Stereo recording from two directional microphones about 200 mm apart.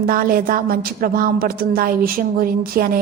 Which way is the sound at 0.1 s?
45° right (ahead or behind).